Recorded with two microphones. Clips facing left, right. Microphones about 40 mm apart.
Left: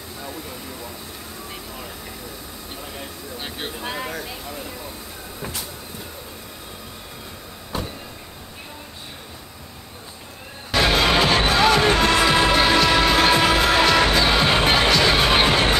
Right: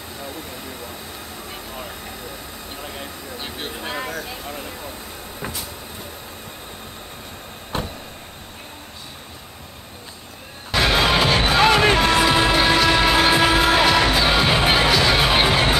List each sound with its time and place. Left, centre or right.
3.3 s speech: centre
7.7 s vehicle: right
10.7 s music: centre